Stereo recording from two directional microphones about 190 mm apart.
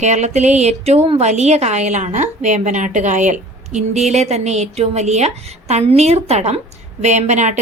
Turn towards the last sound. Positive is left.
turn(degrees=-40)  # may be behind; listen again after turning